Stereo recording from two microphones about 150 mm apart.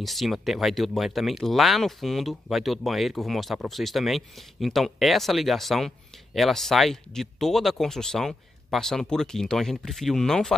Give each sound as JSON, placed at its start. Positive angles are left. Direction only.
{"t": 0.0, "sound": "speech", "side_deg": 0}